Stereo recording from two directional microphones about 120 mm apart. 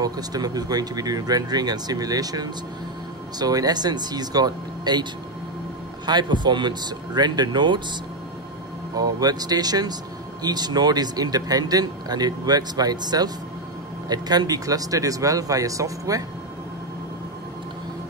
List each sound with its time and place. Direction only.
0.0 s a man's voice: 35° right (ahead or behind)
6.0 s a man's voice: 40° right (ahead or behind)
8.9 s a man's voice: 30° right (ahead or behind)